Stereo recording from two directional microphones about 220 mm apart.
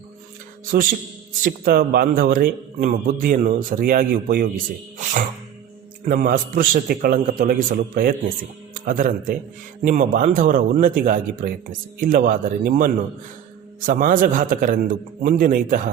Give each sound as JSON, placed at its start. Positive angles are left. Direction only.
{"t": 0.7, "sound": "speech", "side_deg": -40}